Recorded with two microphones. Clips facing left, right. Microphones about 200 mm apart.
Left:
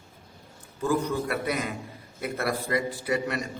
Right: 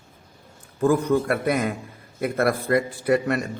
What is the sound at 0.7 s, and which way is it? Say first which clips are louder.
A man's voice: right 7 dB; 50° right (ahead or behind).